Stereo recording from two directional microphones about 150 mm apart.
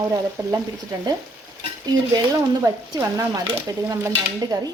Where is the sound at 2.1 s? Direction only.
25° right (ahead or behind).